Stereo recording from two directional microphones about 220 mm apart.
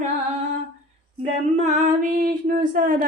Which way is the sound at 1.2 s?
30° right (ahead or behind).